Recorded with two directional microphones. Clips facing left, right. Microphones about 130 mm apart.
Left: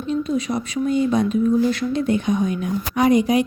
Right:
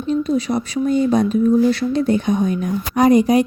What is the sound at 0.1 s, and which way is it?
Speech, 35° right (ahead or behind).